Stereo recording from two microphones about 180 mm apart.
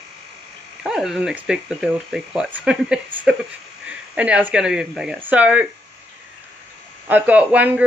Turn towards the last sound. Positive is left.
turn(degrees=-10)  # may be behind; listen again after turning